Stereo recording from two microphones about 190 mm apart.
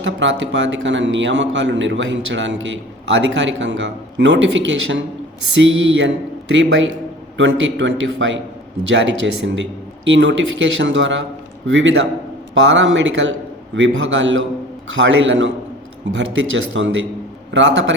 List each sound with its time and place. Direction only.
0.0 s a man's voice: 70° right (ahead or behind)
5.5 s a man's voice: 85° right